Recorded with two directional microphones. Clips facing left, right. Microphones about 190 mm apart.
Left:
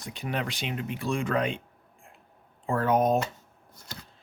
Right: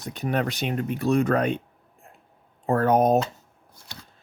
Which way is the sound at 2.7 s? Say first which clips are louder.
Right 4 dB; 40° right (ahead or behind).